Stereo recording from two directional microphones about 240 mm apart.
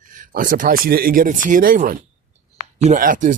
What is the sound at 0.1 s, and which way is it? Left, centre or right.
Speech, right.